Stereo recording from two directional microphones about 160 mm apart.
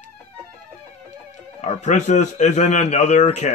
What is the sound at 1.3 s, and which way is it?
A man's voice, 45° left (ahead or behind).